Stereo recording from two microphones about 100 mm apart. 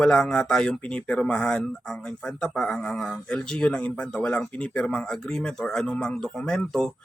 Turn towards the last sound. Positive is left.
turn(degrees=5)  # may be behind; listen again after turning